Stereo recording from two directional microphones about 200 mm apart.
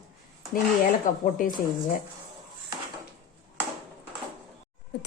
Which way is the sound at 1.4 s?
40° left (ahead or behind).